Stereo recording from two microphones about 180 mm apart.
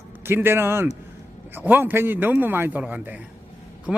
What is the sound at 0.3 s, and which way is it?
A man's voice, 10° right (ahead or behind).